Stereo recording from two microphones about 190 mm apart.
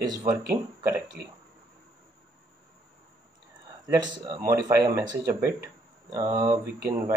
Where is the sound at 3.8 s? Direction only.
20° right (ahead or behind).